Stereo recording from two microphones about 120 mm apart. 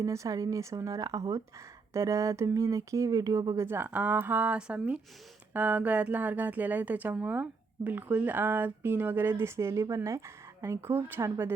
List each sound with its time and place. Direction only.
0.0 s speech: 25° right (ahead or behind)